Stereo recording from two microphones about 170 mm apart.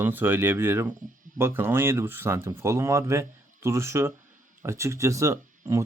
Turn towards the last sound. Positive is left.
turn(degrees=-15)  # may be behind; listen again after turning